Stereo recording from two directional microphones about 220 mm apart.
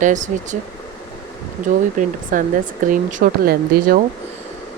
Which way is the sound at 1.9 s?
35° right (ahead or behind).